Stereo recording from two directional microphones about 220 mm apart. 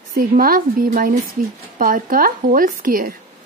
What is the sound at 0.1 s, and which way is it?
A woman's voice, 40° right (ahead or behind).